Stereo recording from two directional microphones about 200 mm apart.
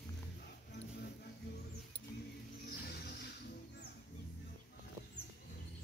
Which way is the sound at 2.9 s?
50° left (ahead or behind).